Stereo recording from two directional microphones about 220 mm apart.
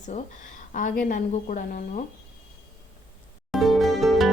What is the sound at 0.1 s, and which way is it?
A woman's voice, 30° left (ahead or behind).